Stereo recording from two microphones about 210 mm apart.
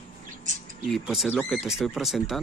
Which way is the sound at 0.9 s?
Centre (ahead or behind).